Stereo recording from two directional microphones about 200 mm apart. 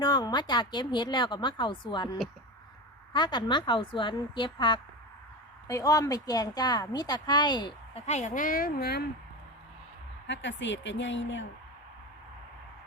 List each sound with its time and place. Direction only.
0.0 s speech: 20° left (ahead or behind)
3.1 s speech: 25° left (ahead or behind)
8.0 s speech: 35° left (ahead or behind); by 9.0 s 50° left (ahead or behind)
10.2 s speech: 65° left (ahead or behind)